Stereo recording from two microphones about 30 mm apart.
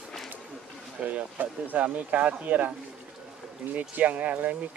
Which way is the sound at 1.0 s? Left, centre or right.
Right.